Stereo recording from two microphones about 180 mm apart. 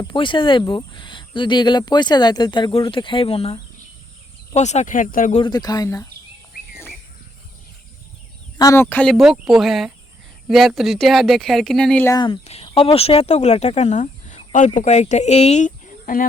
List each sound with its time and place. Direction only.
0.0 s speech: 25° left (ahead or behind); by 5.4 s 45° left (ahead or behind)
5.4 s speech: 20° left (ahead or behind)
8.5 s speech: 15° left (ahead or behind)
12.0 s speech: 25° left (ahead or behind); by 16.2 s 45° left (ahead or behind)